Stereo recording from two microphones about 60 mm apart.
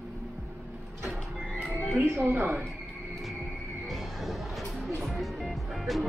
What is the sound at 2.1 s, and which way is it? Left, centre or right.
Speech, right.